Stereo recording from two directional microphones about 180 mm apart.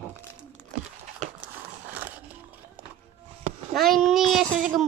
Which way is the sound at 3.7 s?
Centre (ahead or behind).